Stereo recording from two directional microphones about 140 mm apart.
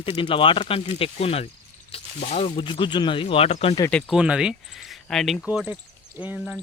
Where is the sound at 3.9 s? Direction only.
10° left (ahead or behind).